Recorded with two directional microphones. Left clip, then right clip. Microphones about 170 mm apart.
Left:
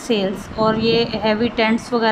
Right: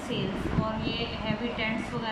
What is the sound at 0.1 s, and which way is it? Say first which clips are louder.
A woman's voice: left 12 dB; 75° left (ahead or behind).